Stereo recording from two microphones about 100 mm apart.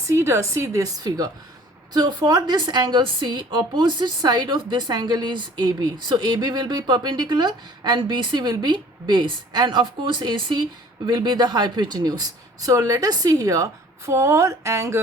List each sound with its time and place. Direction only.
0.1 s a woman's voice: 30° right (ahead or behind)